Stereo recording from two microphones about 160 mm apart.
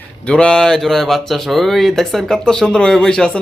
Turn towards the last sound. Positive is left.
turn(degrees=5)  # may be behind; listen again after turning